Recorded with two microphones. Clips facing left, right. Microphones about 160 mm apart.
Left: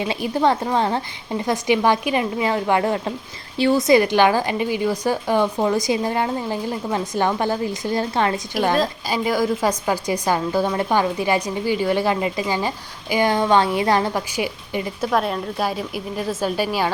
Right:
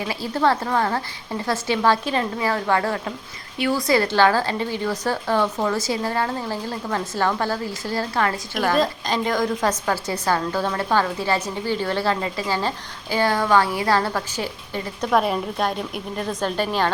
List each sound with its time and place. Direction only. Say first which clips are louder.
0.0 s a woman's voice: left 2 dB; 20° left (ahead or behind)
8.7 s a woman's voice: even; 5° left (ahead or behind)
15.0 s a woman's voice: right 2 dB; centre (ahead or behind)